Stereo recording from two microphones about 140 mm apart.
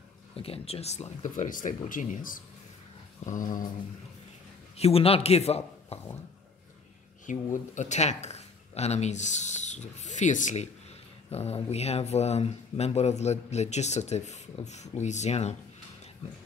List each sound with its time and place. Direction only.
0.4 s speech: 45° left (ahead or behind); by 2.4 s 75° left (ahead or behind)
3.3 s mantra: 70° left (ahead or behind)
4.7 s a man's voice: 45° left (ahead or behind)
7.2 s speech: 60° left (ahead or behind)
11.2 s speech: 45° left (ahead or behind)